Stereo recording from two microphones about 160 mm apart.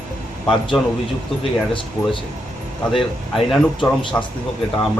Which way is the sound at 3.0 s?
Centre (ahead or behind).